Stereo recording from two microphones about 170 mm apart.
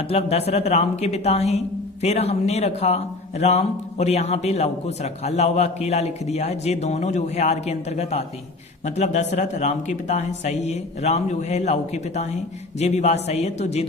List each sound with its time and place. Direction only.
0.1 s a woman's voice: 35° left (ahead or behind)